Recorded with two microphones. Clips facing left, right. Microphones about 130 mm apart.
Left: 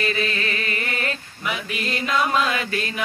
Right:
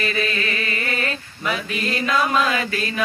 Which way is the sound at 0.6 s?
20° left (ahead or behind).